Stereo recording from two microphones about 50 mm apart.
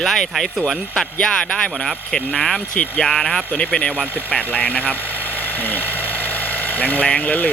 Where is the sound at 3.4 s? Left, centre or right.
Left.